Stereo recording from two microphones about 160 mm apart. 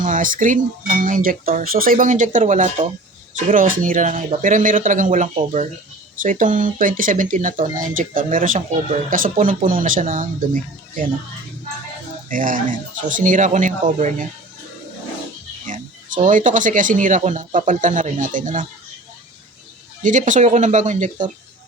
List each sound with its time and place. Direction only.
0.0 s speech: 55° right (ahead or behind)
12.3 s speech: 60° right (ahead or behind)
15.6 s speech: 55° right (ahead or behind)
20.0 s speech: 50° right (ahead or behind)